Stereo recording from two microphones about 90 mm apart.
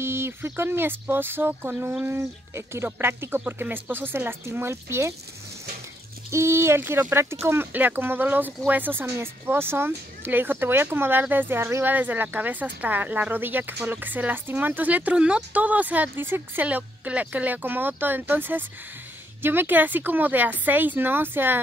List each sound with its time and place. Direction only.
0.0 s speech: 25° right (ahead or behind)
6.3 s speech: 30° right (ahead or behind)